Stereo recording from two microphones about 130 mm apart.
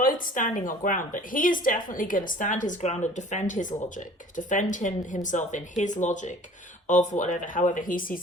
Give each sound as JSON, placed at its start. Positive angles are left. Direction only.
{"t": 0.0, "sound": "a woman's voice", "side_deg": 90}